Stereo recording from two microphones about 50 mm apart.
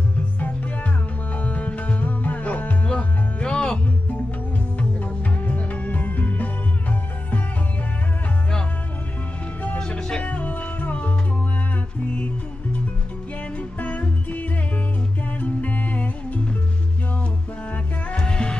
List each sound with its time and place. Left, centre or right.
1.3 s music: left
9.8 s music: centre
10.3 s music: left
13.6 s music: left
18.1 s music: centre